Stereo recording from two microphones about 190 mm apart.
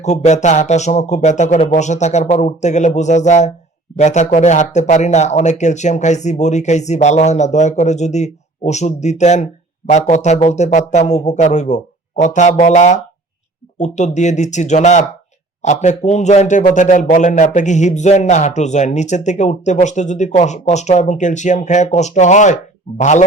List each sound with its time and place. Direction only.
0.0 s a man's voice: 35° left (ahead or behind)